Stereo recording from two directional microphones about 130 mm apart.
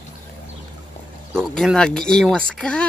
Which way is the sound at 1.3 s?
Centre (ahead or behind).